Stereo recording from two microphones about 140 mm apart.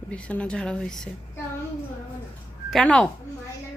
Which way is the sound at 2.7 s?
5° left (ahead or behind).